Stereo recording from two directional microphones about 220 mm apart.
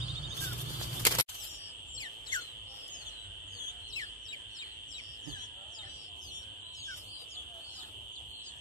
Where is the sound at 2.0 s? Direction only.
20° left (ahead or behind).